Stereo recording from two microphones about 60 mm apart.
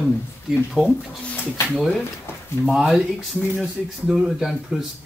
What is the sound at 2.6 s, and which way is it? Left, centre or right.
Speech, centre.